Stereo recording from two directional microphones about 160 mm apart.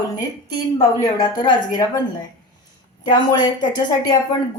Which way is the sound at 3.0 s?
25° left (ahead or behind).